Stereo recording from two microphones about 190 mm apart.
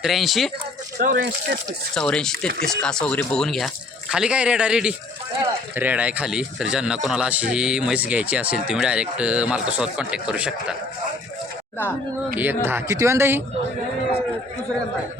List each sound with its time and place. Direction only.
0.0 s speech: centre (ahead or behind)
0.9 s speech: 55° right (ahead or behind)
2.0 s speech: 5° left (ahead or behind)
12.4 s speech: 10° right (ahead or behind)